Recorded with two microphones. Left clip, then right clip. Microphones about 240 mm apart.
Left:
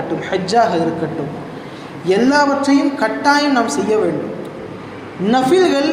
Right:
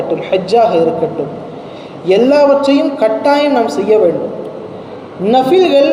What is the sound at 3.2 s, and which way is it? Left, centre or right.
Speech, left.